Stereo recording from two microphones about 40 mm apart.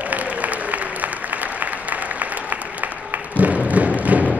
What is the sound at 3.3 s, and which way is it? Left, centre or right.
Thump, right.